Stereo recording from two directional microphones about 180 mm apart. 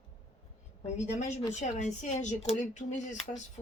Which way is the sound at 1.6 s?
40° left (ahead or behind).